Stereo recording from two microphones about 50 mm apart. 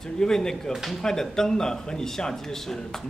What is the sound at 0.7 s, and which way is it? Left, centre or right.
Speech, centre.